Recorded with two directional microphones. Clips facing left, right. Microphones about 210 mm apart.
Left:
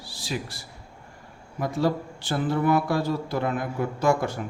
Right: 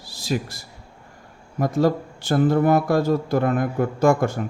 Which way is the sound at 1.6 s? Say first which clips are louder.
Right 5 dB; 45° right (ahead or behind).